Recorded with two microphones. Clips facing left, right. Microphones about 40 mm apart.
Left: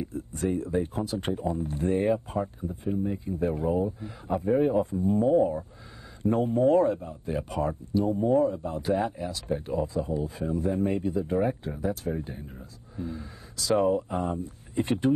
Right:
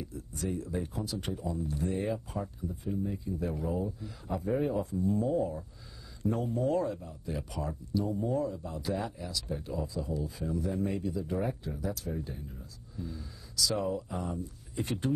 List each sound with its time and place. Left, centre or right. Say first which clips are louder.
0.0 s speech: left 7 dB; left